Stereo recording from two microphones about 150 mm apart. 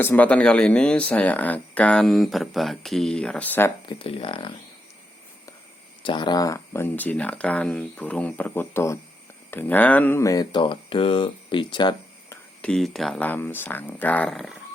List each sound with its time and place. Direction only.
0.0 s speech: 10° left (ahead or behind)
3.8 s speech: 35° left (ahead or behind)
6.0 s speech: 30° left (ahead or behind)
12.6 s speech: 5° left (ahead or behind)